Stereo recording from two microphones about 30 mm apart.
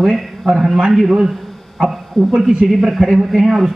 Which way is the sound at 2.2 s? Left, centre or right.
Centre.